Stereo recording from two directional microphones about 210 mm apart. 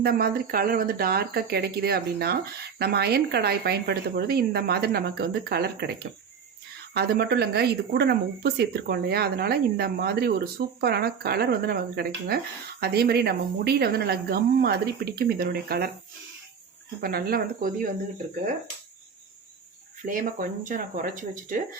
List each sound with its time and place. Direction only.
0.0 s speech: 45° right (ahead or behind)
17.0 s speech: 45° right (ahead or behind)
20.1 s speech: 40° right (ahead or behind)